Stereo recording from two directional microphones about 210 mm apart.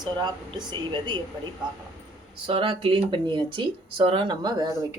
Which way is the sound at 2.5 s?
25° right (ahead or behind).